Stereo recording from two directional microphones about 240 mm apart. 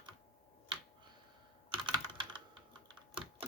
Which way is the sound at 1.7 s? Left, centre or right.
Right.